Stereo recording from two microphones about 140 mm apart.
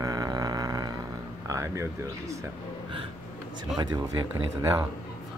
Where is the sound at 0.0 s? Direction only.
25° right (ahead or behind).